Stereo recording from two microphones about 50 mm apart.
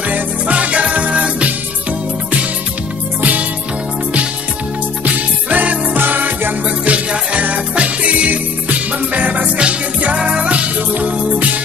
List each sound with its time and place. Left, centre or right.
0.1 s music: right
3.2 s music: right
5.0 s music: right
6.8 s music: right